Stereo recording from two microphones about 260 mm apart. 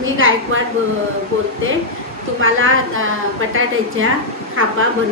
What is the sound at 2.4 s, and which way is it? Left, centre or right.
A woman's voice, right.